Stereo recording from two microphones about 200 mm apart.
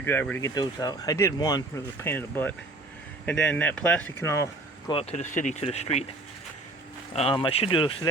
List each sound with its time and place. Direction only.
0.0 s speech: 10° left (ahead or behind)
4.9 s speech: 30° left (ahead or behind)
7.1 s speech: 30° left (ahead or behind)